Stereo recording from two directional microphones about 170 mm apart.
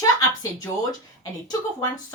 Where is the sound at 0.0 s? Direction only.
20° left (ahead or behind).